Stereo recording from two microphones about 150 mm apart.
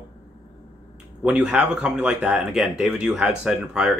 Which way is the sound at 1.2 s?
5° right (ahead or behind).